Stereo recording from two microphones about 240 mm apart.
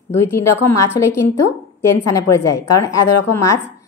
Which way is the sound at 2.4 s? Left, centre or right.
Left.